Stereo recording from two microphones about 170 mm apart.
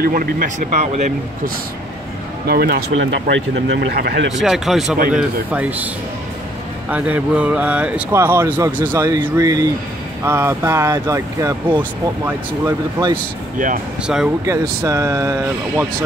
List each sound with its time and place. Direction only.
0.0 s speech: 55° right (ahead or behind)
2.4 s speech: 65° right (ahead or behind)
4.4 s speech: centre (ahead or behind)
6.9 s speech: 10° right (ahead or behind)
14.4 s speech: 20° right (ahead or behind)